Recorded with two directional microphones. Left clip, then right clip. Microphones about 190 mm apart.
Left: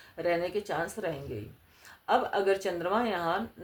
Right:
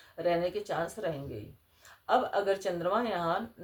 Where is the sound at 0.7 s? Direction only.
30° left (ahead or behind).